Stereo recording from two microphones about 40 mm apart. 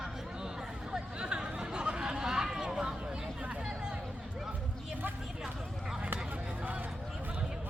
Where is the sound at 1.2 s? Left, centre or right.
Right.